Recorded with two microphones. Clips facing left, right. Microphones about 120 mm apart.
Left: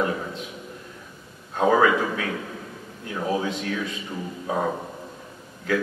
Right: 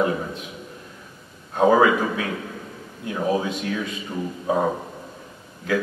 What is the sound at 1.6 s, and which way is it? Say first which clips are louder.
Speech: right 3 dB; 10° right (ahead or behind).